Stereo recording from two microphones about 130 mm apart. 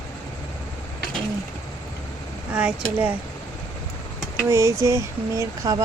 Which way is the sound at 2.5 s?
10° right (ahead or behind).